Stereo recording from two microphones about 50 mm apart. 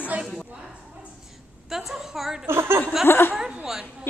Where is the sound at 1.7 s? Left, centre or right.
Centre.